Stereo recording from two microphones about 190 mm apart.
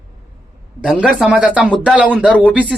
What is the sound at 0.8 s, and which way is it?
Speech, 5° right (ahead or behind).